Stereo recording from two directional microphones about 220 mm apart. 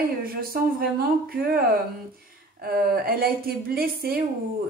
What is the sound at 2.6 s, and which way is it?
A woman's voice, 45° right (ahead or behind).